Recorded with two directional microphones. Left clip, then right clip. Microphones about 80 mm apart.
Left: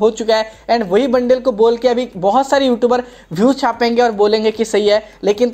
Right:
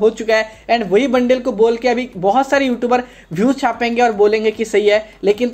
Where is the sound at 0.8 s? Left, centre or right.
Left.